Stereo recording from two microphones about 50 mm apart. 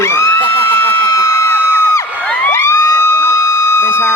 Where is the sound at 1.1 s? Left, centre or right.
Left.